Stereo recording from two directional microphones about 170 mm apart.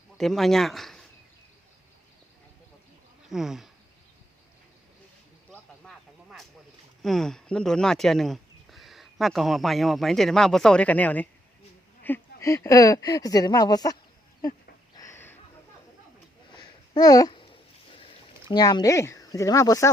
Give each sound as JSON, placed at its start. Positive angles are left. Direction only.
{"t": 0.2, "sound": "speech", "side_deg": 0}
{"t": 3.2, "sound": "speech", "side_deg": 0}
{"t": 5.5, "sound": "a sound", "side_deg": 5}
{"t": 7.0, "sound": "speech", "side_deg": 0}
{"t": 14.9, "sound": "a sound", "side_deg": 15}
{"t": 16.6, "sound": "babbling", "side_deg": 25}
{"t": 17.9, "sound": "speech", "side_deg": 30}